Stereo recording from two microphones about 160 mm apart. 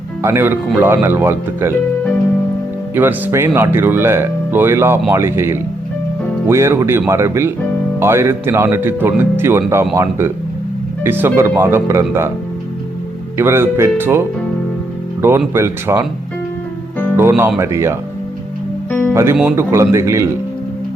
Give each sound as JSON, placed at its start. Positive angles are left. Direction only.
{"t": 0.2, "sound": "speech", "side_deg": -15}
{"t": 2.9, "sound": "speech", "side_deg": -10}
{"t": 13.3, "sound": "speech", "side_deg": -15}
{"t": 15.2, "sound": "speech", "side_deg": -15}
{"t": 17.2, "sound": "speech", "side_deg": -15}
{"t": 18.9, "sound": "music", "side_deg": 10}
{"t": 19.1, "sound": "speech", "side_deg": -15}